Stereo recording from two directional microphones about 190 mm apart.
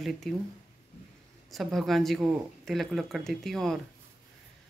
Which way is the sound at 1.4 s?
Centre (ahead or behind).